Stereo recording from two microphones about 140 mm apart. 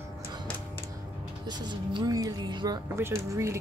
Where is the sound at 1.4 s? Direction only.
30° right (ahead or behind).